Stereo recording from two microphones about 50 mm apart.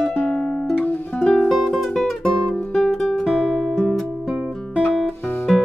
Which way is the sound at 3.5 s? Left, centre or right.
Centre.